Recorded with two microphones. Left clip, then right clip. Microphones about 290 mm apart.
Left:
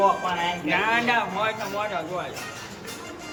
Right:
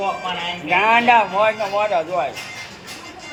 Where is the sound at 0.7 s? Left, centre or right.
Right.